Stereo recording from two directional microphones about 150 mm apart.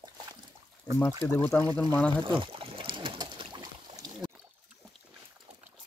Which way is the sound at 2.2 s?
35° right (ahead or behind).